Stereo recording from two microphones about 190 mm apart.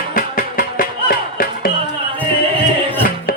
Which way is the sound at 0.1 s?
45° left (ahead or behind).